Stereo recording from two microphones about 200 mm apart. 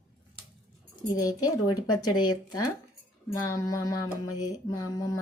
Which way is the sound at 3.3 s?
15° left (ahead or behind).